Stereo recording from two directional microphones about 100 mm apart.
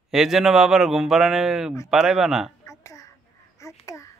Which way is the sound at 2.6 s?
30° left (ahead or behind).